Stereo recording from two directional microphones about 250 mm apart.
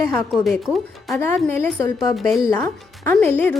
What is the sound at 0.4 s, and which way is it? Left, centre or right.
A woman's voice, centre.